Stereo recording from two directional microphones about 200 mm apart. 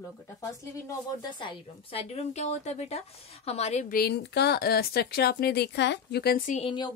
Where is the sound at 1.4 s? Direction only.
30° left (ahead or behind).